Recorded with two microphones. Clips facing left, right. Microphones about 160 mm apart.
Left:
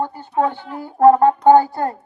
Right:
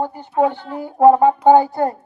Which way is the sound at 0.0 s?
15° right (ahead or behind).